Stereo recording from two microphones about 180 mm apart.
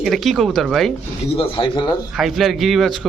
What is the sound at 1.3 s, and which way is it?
Speech, 25° left (ahead or behind).